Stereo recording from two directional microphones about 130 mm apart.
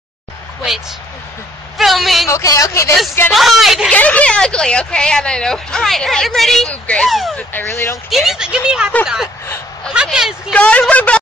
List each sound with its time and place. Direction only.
1.8 s a sound: centre (ahead or behind)
2.2 s speech: 25° left (ahead or behind)
2.9 s speech: centre (ahead or behind)
3.9 s speech: 10° left (ahead or behind)
7.3 s speech: 15° left (ahead or behind)
8.1 s speech: 5° right (ahead or behind)
10.5 s a woman's voice: 10° left (ahead or behind)